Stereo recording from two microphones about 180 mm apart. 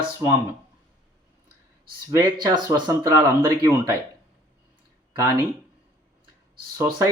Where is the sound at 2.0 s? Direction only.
20° right (ahead or behind).